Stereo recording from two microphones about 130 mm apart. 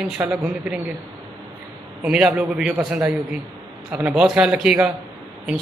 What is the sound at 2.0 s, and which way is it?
A man's voice, 10° right (ahead or behind).